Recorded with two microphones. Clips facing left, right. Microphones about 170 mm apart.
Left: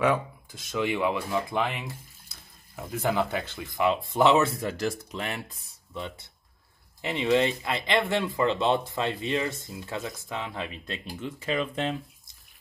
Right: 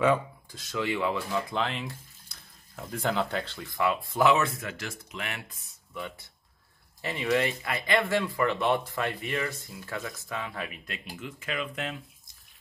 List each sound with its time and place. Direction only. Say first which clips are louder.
0.7 s speech: left 2 dB; 15° left (ahead or behind)